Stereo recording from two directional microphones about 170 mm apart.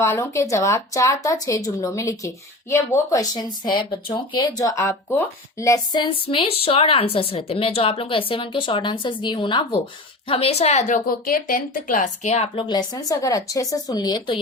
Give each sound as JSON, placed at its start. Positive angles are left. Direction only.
{"t": 0.0, "sound": "a woman's voice", "side_deg": 15}
{"t": 12.5, "sound": "speech", "side_deg": 25}